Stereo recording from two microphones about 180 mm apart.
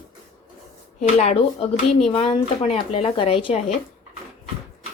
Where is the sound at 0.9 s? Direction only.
40° left (ahead or behind).